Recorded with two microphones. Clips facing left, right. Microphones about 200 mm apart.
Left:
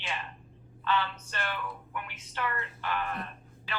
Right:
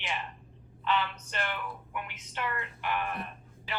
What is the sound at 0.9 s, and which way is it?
A woman's voice, 15° right (ahead or behind).